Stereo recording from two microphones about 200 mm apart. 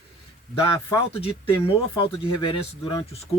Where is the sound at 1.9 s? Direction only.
25° left (ahead or behind).